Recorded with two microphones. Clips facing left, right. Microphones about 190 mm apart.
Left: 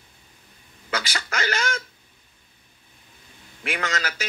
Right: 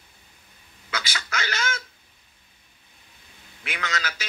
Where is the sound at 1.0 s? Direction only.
40° left (ahead or behind).